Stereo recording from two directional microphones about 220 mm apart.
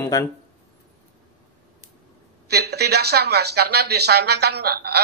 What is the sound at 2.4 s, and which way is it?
Speech, 45° right (ahead or behind).